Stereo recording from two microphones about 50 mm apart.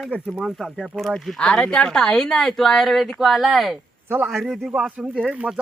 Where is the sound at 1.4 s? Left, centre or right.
Left; by 4.7 s centre.